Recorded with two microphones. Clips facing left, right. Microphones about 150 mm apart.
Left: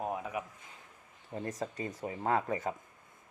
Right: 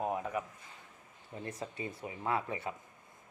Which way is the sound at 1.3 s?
40° left (ahead or behind).